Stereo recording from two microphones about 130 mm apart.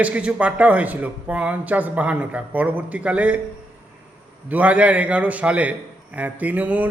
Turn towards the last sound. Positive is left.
turn(degrees=-10)  # may be behind; listen again after turning